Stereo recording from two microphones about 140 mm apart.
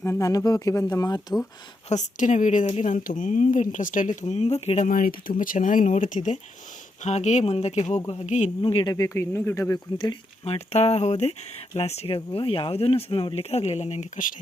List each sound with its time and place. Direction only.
0.0 s speech: 20° left (ahead or behind)
1.9 s speech: 60° left (ahead or behind)
2.9 s speech: 70° left (ahead or behind); by 4.9 s 50° left (ahead or behind)
4.9 s speech: 85° left; by 8.4 s 55° left (ahead or behind)
8.6 s speech: 35° left (ahead or behind); by 9.7 s 20° left (ahead or behind)
10.4 s speech: 45° left (ahead or behind); by 14.3 s 65° left (ahead or behind)